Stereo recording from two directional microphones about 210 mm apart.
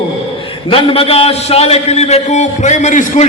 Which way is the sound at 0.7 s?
25° left (ahead or behind).